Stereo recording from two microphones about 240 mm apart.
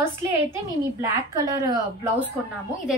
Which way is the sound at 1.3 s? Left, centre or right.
Centre.